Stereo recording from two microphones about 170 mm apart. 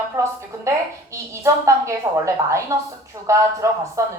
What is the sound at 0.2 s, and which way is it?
Speech, 15° right (ahead or behind).